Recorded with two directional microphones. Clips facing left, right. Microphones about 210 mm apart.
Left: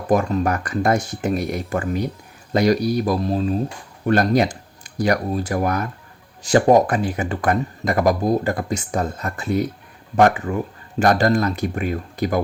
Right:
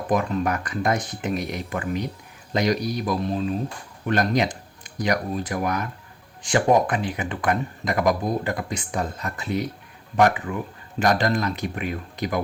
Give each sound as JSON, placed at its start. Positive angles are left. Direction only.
{"t": 0.1, "sound": "speech", "side_deg": 45}